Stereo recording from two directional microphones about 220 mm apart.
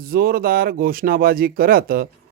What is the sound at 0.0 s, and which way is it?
Speech, 40° right (ahead or behind).